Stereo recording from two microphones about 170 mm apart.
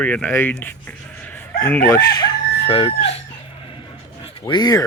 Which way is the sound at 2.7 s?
30° left (ahead or behind).